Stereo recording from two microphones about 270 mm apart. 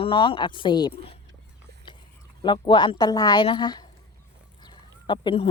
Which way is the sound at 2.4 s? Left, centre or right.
Centre.